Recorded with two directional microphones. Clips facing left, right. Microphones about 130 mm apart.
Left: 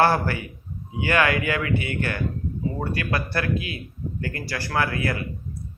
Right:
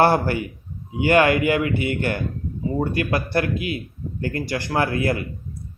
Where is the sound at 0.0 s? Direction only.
25° right (ahead or behind).